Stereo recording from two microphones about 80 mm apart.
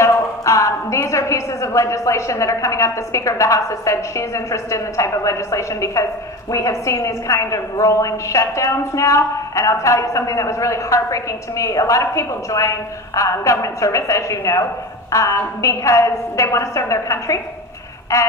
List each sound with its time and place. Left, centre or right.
0.0 s a woman's voice: left